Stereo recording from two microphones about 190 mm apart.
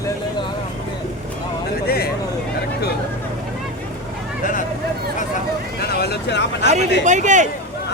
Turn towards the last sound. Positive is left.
turn(degrees=-40)  # may be behind; listen again after turning